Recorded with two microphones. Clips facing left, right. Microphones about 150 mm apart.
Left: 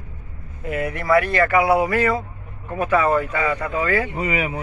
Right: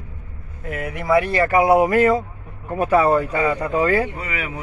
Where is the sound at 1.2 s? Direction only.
30° right (ahead or behind).